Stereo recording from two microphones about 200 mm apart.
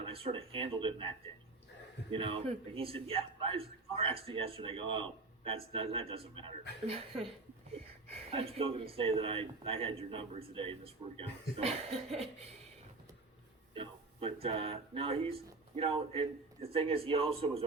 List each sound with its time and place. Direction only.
0.0 s speech: 30° right (ahead or behind)
13.7 s a sound: 25° right (ahead or behind)
14.4 s speech: 30° right (ahead or behind)